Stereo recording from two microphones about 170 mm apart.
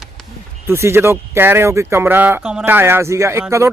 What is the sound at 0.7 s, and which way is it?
Speech, 15° right (ahead or behind).